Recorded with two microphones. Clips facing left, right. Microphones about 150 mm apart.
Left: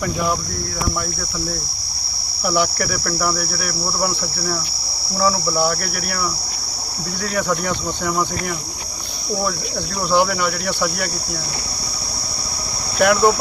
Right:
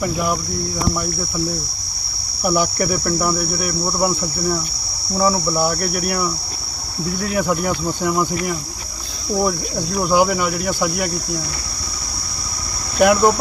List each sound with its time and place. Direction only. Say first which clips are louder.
2.5 s cricket: right 2 dB; 20° right (ahead or behind)
7.3 s cricket: right 1 dB; 5° right (ahead or behind)
9.4 s cricket: right 5 dB; 20° right (ahead or behind)
10.0 s speech: right 1 dB; 5° right (ahead or behind)
13.0 s speech: right 1 dB; 5° right (ahead or behind)